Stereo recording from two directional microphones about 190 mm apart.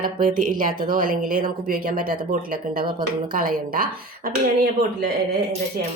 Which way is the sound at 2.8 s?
25° right (ahead or behind).